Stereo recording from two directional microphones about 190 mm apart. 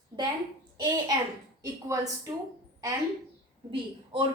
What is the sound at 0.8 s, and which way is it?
A child's voice, 20° right (ahead or behind).